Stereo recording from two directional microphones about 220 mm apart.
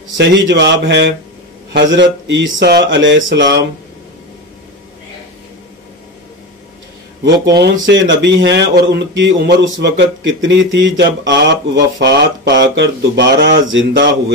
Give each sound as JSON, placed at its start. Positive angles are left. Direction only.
{"t": 0.5, "sound": "speech", "side_deg": -55}
{"t": 7.2, "sound": "speech", "side_deg": -50}